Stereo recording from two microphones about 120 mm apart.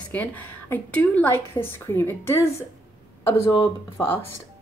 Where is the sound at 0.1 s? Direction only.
15° left (ahead or behind).